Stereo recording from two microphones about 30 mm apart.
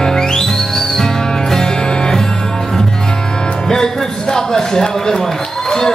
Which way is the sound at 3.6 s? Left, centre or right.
Centre.